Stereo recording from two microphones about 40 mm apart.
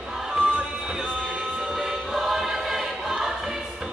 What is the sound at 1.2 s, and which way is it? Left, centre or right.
Music, right.